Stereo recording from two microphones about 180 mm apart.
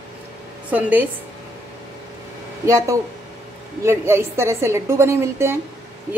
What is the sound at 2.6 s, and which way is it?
A woman's voice, 15° right (ahead or behind).